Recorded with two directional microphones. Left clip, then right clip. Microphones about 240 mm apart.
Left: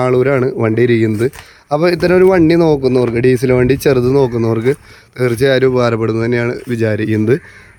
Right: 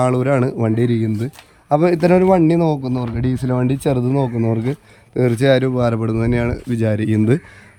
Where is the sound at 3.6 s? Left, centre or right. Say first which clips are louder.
Left 8 dB; left.